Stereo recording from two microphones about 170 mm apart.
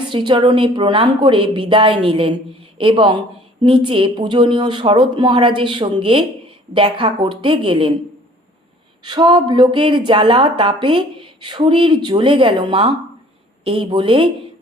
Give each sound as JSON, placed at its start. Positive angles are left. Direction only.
{"t": 0.1, "sound": "a woman's voice", "side_deg": -30}
{"t": 9.0, "sound": "a woman's voice", "side_deg": -25}